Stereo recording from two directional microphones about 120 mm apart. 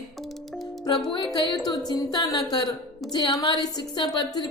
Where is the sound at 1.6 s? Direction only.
35° left (ahead or behind).